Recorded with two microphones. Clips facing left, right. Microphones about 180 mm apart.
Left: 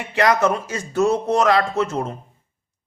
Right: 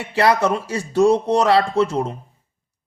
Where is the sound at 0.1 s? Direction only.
30° right (ahead or behind).